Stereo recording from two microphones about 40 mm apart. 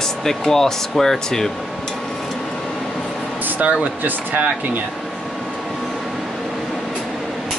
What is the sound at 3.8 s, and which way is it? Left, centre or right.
Speech, right.